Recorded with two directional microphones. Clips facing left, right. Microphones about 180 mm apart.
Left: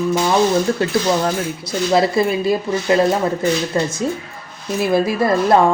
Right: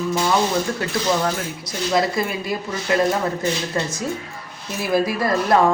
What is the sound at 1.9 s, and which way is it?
A woman's voice, 30° left (ahead or behind).